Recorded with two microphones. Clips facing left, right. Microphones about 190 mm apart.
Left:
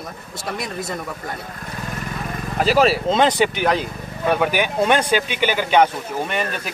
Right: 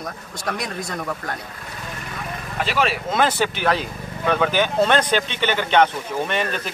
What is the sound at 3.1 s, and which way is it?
Speech, 20° left (ahead or behind).